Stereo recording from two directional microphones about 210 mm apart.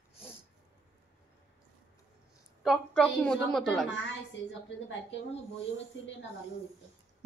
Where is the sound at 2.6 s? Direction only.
Centre (ahead or behind).